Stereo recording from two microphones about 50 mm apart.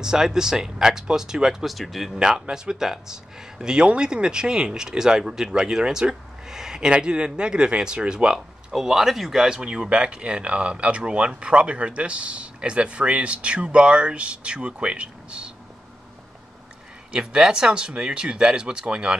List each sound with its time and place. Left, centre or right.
0.0 s speech: centre
2.1 s speech: centre
17.1 s speech: centre